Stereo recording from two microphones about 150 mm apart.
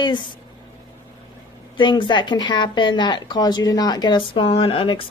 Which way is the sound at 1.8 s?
30° left (ahead or behind).